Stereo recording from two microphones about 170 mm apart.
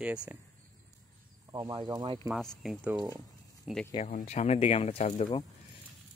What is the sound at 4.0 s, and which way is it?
Speech, 45° left (ahead or behind).